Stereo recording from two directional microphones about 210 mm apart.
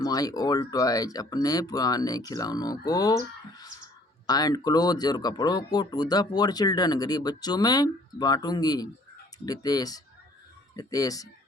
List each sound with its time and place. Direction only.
0.0 s speech: 15° left (ahead or behind)